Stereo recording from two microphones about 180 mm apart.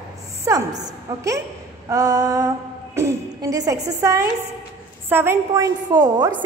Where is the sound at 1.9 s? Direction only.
20° right (ahead or behind).